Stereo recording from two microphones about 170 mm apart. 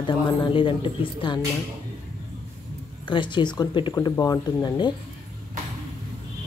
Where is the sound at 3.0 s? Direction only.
30° left (ahead or behind).